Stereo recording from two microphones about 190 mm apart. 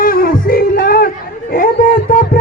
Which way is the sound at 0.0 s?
50° left (ahead or behind).